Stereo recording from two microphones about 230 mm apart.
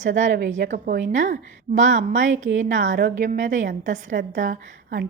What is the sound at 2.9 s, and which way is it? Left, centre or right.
A woman's voice, right.